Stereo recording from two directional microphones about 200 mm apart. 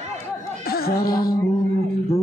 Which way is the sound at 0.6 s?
50° left (ahead or behind).